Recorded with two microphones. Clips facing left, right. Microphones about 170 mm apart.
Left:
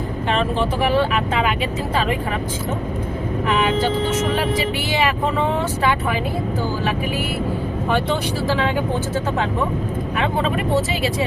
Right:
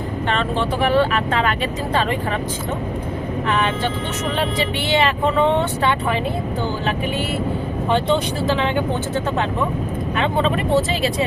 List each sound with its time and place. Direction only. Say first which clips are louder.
0.3 s speech: left 1 dB; 5° left (ahead or behind)
7.9 s speech: right 3 dB; 25° right (ahead or behind)